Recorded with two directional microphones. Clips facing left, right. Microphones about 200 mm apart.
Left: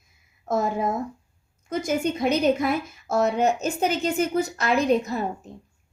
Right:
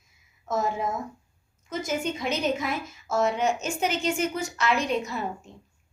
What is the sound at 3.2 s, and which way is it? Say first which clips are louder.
Speech: left 3 dB; 40° left (ahead or behind).